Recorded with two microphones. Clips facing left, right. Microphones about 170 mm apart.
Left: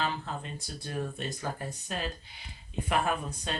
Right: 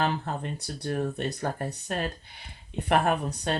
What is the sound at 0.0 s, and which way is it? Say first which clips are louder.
Speech: right 5 dB; 55° right (ahead or behind).